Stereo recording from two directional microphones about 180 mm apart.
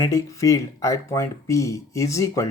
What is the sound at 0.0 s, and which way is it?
Speech, 20° left (ahead or behind).